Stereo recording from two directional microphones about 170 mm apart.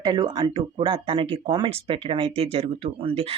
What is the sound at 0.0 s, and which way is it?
Speech, 25° right (ahead or behind).